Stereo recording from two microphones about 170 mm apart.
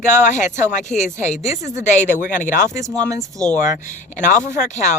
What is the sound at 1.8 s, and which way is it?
Speech, 45° left (ahead or behind).